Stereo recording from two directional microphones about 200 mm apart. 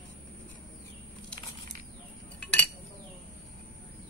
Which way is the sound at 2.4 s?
5° left (ahead or behind).